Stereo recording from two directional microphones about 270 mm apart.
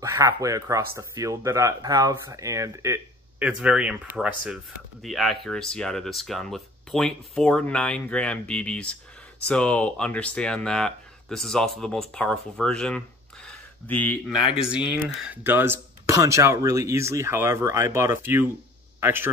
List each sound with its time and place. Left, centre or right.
0.0 s a man's voice: centre